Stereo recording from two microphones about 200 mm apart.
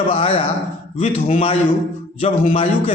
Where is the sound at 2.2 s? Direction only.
30° left (ahead or behind).